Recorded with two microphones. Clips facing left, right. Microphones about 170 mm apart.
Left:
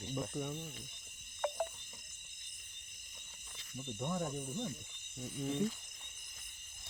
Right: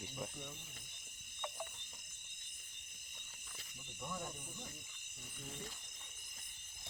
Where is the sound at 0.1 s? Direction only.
70° left (ahead or behind).